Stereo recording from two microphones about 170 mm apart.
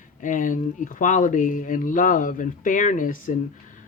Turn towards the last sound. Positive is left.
turn(degrees=50)  # may be behind; listen again after turning